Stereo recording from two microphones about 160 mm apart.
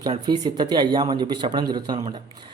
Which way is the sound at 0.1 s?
25° right (ahead or behind).